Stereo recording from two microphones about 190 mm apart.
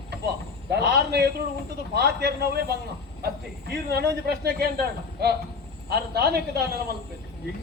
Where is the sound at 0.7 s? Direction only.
55° right (ahead or behind).